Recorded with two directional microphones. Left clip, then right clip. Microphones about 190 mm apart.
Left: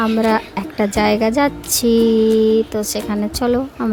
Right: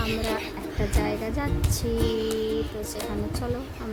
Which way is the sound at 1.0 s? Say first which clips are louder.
Left 17 dB; 45° left (ahead or behind).